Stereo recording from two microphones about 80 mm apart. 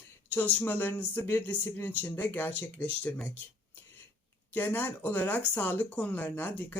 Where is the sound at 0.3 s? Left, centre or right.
Left.